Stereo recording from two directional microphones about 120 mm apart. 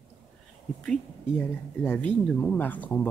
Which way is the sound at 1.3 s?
15° left (ahead or behind).